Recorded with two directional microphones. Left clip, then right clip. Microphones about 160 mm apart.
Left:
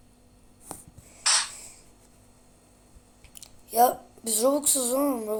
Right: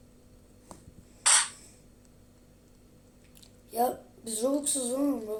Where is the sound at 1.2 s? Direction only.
35° right (ahead or behind).